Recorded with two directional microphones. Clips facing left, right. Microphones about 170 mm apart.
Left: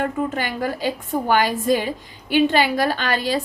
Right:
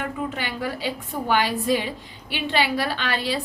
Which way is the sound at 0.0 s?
45° left (ahead or behind).